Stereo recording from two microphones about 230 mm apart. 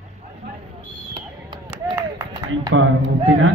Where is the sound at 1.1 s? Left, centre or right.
Centre.